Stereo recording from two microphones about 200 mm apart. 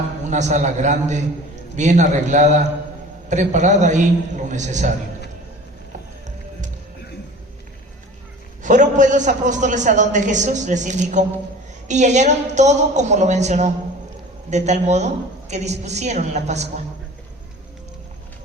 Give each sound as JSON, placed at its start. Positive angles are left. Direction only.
{"t": 0.3, "sound": "a man's voice", "side_deg": -35}
{"t": 8.6, "sound": "a man's voice", "side_deg": -40}